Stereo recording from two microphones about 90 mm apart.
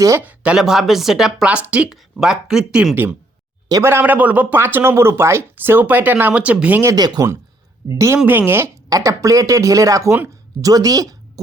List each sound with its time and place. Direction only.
0.2 s speech: 15° right (ahead or behind)
0.6 s speech: centre (ahead or behind)
2.9 s speech: 20° right (ahead or behind)
6.9 s speech: 45° right (ahead or behind)
7.9 s speech: 35° right (ahead or behind)
8.2 s speech: 20° right (ahead or behind)
8.9 s a woman's voice: 40° right (ahead or behind)